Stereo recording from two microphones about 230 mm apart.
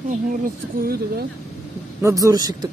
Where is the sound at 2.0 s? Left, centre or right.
Centre.